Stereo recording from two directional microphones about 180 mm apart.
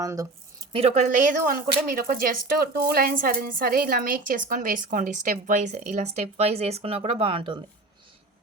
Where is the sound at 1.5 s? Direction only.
55° right (ahead or behind); by 7.6 s 30° right (ahead or behind).